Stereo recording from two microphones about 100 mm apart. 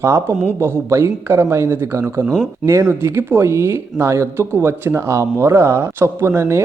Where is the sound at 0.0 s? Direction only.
25° right (ahead or behind).